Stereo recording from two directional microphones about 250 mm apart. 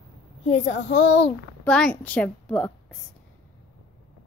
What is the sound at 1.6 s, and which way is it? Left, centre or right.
A woman's voice, centre.